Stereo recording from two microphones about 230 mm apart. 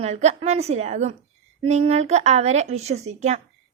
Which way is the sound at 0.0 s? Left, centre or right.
Right.